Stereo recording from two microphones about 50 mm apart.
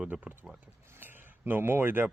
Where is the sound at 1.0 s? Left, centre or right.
Right.